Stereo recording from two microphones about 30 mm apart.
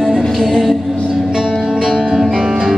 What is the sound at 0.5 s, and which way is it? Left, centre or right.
Music, centre.